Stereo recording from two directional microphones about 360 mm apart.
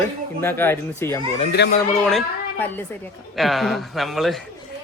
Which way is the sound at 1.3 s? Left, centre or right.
Left.